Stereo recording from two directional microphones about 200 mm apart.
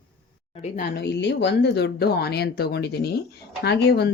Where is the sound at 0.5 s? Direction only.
40° left (ahead or behind).